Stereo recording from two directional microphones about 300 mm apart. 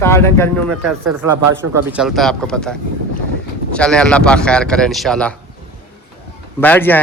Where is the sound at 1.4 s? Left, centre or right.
Right.